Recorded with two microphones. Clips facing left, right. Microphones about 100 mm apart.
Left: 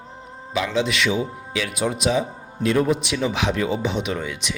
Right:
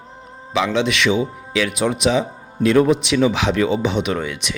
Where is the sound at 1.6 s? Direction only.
90° right.